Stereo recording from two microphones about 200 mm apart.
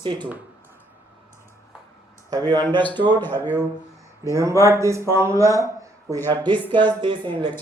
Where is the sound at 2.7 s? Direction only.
10° left (ahead or behind).